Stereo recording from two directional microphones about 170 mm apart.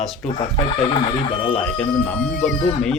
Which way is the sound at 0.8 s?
45° left (ahead or behind).